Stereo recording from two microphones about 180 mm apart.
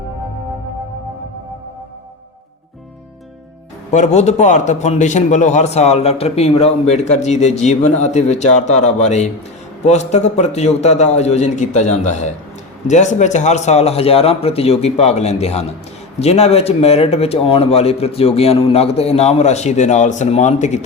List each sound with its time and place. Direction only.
3.9 s a man's voice: 40° left (ahead or behind)